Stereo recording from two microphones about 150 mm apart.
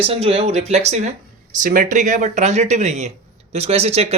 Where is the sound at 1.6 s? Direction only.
65° right (ahead or behind).